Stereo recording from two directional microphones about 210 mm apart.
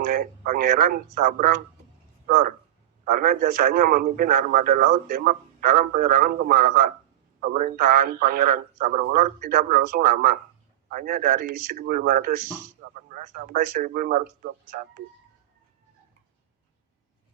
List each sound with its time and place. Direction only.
0.0 s a man's voice: 45° right (ahead or behind)